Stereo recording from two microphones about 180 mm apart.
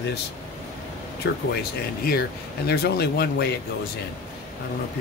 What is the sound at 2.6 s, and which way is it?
Speech, 65° left (ahead or behind).